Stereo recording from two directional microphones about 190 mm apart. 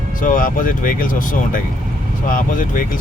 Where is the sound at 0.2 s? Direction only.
45° left (ahead or behind).